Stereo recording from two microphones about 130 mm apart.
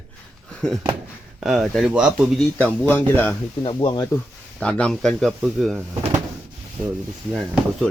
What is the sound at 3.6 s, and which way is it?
Speech, 40° left (ahead or behind).